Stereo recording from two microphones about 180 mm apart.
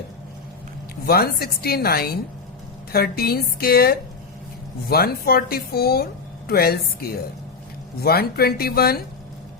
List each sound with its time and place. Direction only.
1.0 s speech: 60° left (ahead or behind)